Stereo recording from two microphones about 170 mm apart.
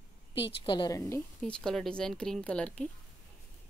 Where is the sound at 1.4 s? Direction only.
5° left (ahead or behind).